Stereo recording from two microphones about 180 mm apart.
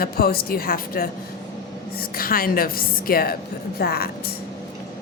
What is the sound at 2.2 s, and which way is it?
A woman's voice, 55° left (ahead or behind).